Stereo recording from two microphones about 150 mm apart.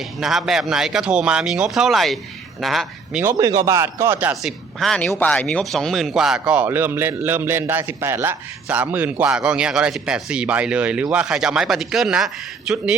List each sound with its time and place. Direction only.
0.2 s speech: centre (ahead or behind)
3.2 s speech: 20° right (ahead or behind)
4.4 s speech: centre (ahead or behind)